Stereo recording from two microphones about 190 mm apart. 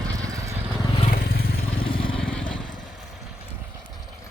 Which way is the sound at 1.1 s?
50° left (ahead or behind).